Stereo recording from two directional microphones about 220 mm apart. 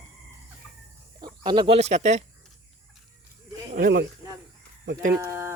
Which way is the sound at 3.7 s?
45° right (ahead or behind).